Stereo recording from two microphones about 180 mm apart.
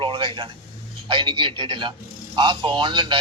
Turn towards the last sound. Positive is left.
turn(degrees=-25)  # may be behind; listen again after turning